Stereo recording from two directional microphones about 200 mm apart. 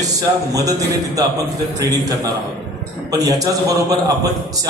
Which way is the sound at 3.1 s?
20° right (ahead or behind).